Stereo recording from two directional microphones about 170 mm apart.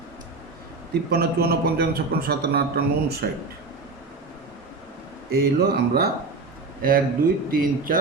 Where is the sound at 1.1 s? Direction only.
65° right (ahead or behind).